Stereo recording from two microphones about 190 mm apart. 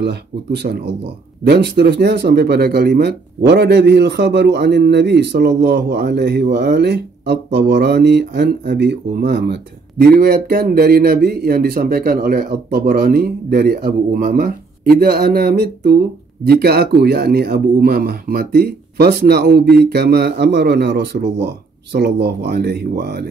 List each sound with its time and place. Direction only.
0.0 s speech: 60° right (ahead or behind)